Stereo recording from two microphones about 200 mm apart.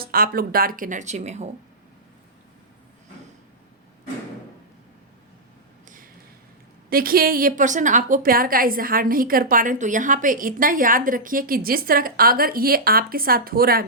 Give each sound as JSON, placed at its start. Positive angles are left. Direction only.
{"t": 0.0, "sound": "a woman's voice", "side_deg": -45}
{"t": 6.9, "sound": "a woman's voice", "side_deg": -45}